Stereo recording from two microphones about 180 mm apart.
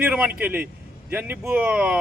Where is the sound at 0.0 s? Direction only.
10° right (ahead or behind).